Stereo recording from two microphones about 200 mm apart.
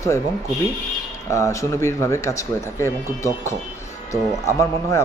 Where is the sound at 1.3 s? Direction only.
15° left (ahead or behind).